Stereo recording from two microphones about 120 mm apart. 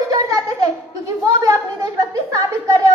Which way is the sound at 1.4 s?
30° right (ahead or behind).